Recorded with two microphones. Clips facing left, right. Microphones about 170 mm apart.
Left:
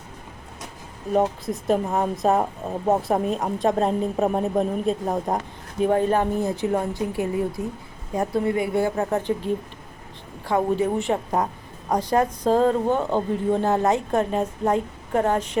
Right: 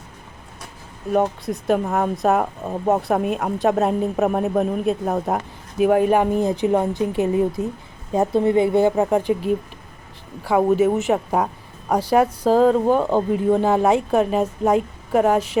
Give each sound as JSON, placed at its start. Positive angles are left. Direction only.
{"t": 1.1, "sound": "a woman's voice", "side_deg": 0}